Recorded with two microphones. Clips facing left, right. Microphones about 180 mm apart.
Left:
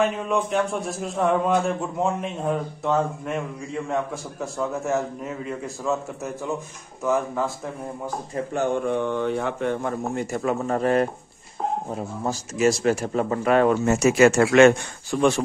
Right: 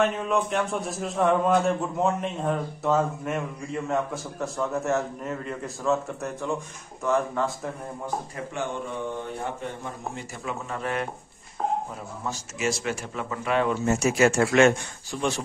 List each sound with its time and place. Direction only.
0.0 s a man's voice: centre (ahead or behind)
8.8 s speech: 70° left (ahead or behind); by 13.7 s 45° left (ahead or behind)
13.8 s speech: 75° left (ahead or behind); by 15.4 s 55° left (ahead or behind)